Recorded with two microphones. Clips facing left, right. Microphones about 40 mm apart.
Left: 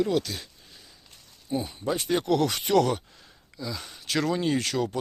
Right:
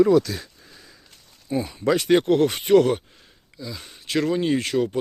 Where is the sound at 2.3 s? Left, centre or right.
Right.